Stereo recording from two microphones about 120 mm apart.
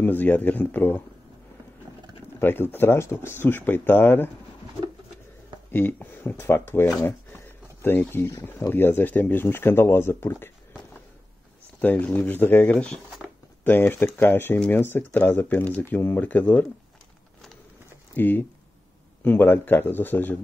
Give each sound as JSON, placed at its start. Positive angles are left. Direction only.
{"t": 0.0, "sound": "speech", "side_deg": 15}
{"t": 2.4, "sound": "speech", "side_deg": 20}
{"t": 5.7, "sound": "speech", "side_deg": 15}
{"t": 11.8, "sound": "speech", "side_deg": 15}
{"t": 18.1, "sound": "speech", "side_deg": 15}